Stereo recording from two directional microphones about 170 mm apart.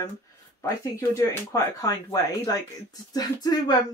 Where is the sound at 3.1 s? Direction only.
25° left (ahead or behind).